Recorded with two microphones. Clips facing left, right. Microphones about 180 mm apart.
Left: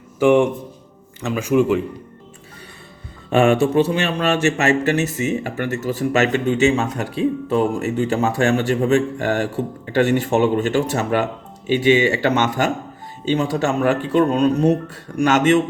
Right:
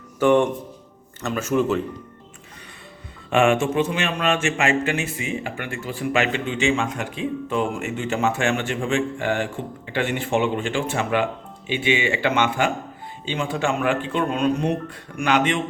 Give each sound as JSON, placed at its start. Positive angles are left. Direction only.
{"t": 0.2, "sound": "speech", "side_deg": 10}
{"t": 3.2, "sound": "speech", "side_deg": 35}